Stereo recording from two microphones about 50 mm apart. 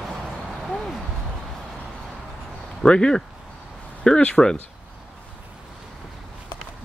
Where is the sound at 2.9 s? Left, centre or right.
Left.